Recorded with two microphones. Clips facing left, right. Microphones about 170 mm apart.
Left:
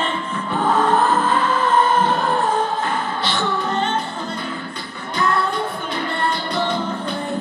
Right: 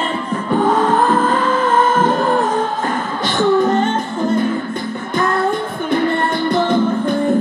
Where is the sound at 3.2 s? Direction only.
45° right (ahead or behind).